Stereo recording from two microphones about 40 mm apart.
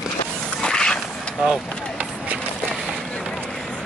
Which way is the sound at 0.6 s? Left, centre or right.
Left.